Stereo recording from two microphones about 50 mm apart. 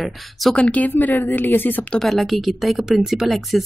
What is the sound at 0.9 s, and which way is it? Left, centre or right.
A woman's voice, left.